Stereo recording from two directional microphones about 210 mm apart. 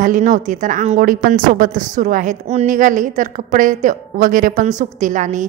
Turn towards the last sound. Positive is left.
turn(degrees=-35)  # may be behind; listen again after turning